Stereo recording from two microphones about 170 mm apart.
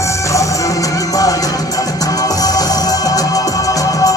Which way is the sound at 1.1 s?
20° left (ahead or behind).